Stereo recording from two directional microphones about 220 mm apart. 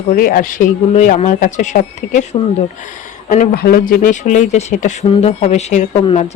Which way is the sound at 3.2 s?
35° left (ahead or behind).